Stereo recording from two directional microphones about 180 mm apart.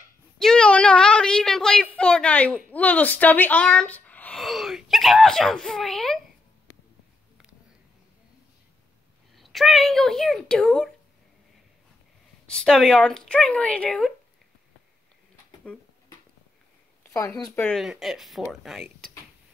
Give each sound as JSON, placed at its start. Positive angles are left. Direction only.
{"t": 0.4, "sound": "a sound", "side_deg": 5}
{"t": 2.0, "sound": "speech", "side_deg": 5}
{"t": 9.3, "sound": "speech", "side_deg": 0}
{"t": 12.4, "sound": "speech", "side_deg": 5}
{"t": 17.1, "sound": "speech", "side_deg": 15}